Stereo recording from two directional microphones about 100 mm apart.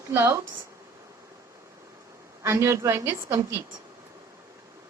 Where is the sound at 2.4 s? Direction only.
30° right (ahead or behind).